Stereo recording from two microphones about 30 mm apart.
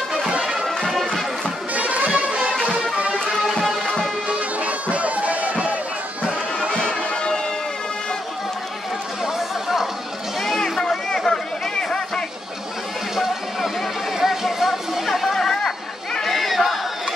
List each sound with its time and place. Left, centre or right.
1.0 s music: centre
1.7 s music: right
4.3 s music: right
6.7 s music: left
9.2 s chatter: centre
10.6 s a sound: left
13.1 s a sound: centre
15.0 s chatter: centre
15.3 s chatter: centre
16.3 s chatter: centre